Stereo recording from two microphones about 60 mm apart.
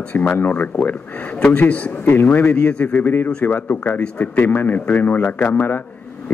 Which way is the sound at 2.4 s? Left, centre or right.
Left.